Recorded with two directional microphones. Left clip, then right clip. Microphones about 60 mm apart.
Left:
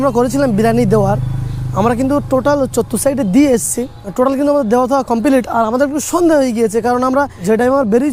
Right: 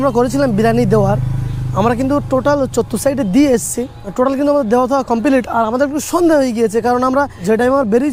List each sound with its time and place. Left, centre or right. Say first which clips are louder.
0.0 s speech: even; left
5.9 s speech: even; left